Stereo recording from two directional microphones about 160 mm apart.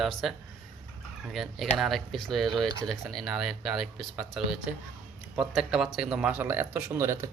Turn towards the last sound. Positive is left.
turn(degrees=-15)  # may be behind; listen again after turning